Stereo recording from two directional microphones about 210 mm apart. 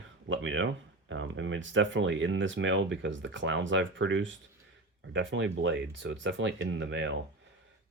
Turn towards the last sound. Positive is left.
turn(degrees=-60)  # may be behind; listen again after turning